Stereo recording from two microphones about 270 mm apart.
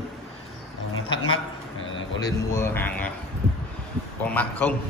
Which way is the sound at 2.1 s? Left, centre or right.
Centre.